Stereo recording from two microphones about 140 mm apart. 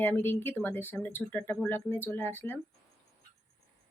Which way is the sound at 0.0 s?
15° left (ahead or behind).